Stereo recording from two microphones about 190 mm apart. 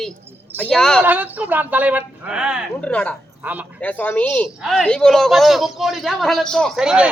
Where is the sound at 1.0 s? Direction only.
10° right (ahead or behind).